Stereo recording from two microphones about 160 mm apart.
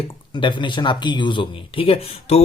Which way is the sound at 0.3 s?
30° left (ahead or behind).